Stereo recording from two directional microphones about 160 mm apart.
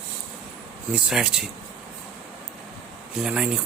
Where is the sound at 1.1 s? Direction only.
5° right (ahead or behind).